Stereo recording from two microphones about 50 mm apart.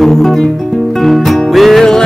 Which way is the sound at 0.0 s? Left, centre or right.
Centre.